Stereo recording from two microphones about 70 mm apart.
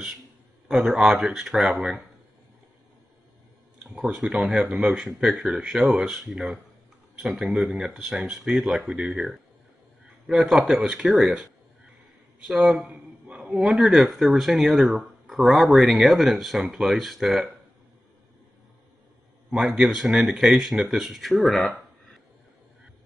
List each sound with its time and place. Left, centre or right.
0.7 s speech: centre
3.8 s speech: right
12.6 s a sound: centre
13.7 s speech: centre
19.5 s speech: centre